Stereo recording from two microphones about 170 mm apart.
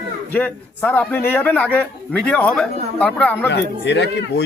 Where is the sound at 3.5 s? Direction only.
90° left.